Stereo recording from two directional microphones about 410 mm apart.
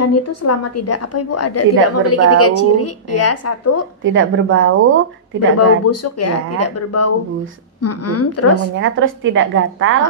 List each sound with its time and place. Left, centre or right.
0.0 s a woman's voice: left
4.0 s a woman's voice: right
5.9 s a woman's voice: left
8.7 s a woman's voice: right